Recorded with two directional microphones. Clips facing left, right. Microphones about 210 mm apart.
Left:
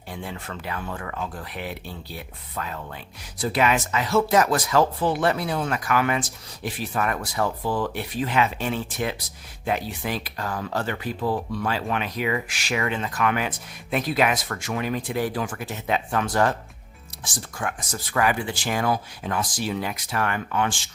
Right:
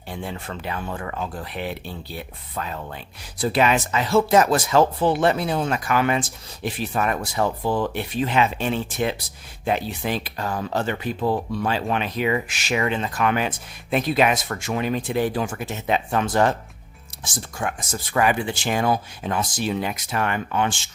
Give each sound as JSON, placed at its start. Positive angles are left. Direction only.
{"t": 0.1, "sound": "speech", "side_deg": -30}